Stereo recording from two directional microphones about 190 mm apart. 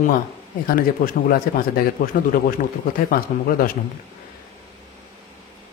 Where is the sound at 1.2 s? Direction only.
50° left (ahead or behind).